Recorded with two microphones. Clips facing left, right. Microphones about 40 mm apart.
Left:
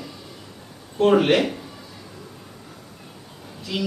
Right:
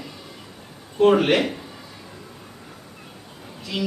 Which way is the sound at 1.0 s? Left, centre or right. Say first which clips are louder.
Even; centre.